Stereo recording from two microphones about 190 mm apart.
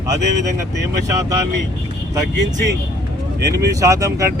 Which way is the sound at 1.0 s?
15° right (ahead or behind).